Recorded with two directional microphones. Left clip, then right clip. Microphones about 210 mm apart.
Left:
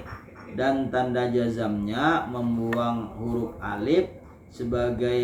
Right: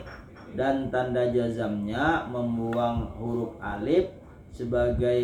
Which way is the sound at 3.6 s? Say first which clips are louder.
Left 1 dB; centre (ahead or behind).